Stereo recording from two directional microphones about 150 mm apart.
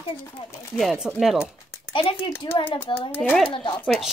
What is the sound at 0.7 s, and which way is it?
Speech, 5° right (ahead or behind).